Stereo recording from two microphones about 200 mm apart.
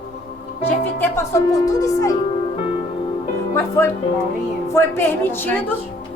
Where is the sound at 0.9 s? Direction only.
10° left (ahead or behind).